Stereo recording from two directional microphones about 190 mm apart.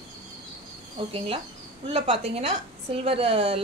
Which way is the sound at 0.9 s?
30° right (ahead or behind).